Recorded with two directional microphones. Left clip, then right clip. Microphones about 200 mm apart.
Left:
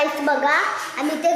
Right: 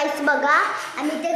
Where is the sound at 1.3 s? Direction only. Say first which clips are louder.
Left 6 dB; 20° left (ahead or behind).